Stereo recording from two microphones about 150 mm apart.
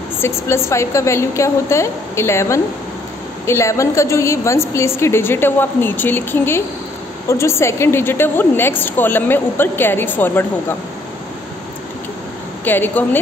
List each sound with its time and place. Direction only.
0.2 s a woman's voice: 20° left (ahead or behind)
12.6 s a woman's voice: 15° left (ahead or behind)